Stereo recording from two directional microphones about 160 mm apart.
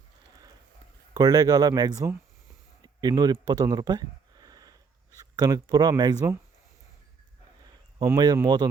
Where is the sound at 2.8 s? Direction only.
25° right (ahead or behind).